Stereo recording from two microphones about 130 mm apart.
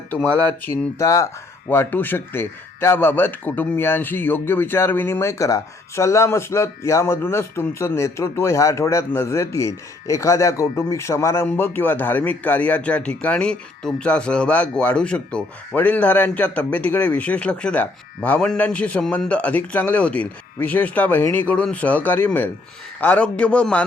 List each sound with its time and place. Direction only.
0.1 s speech: 15° left (ahead or behind)